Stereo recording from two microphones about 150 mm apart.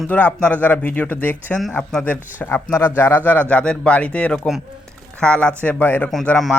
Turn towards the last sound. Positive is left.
turn(degrees=0)  # may be behind; listen again after turning